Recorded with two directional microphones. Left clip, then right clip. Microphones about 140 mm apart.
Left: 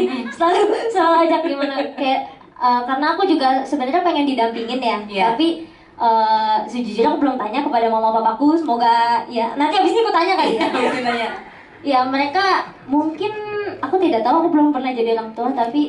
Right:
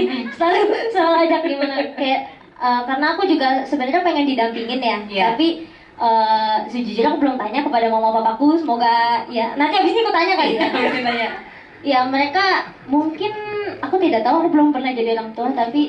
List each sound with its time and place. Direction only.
0.0 s a woman's voice: 15° left (ahead or behind)